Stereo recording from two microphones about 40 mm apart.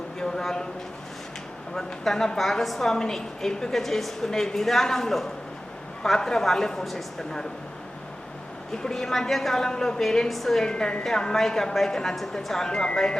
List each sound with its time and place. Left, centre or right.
0.2 s a sound: centre
1.7 s a woman's voice: centre
8.8 s a woman's voice: centre
10.6 s a woman's voice: centre
12.6 s speech: centre